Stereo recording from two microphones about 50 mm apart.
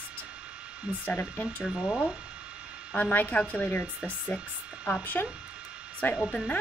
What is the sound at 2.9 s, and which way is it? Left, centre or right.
Speech, left.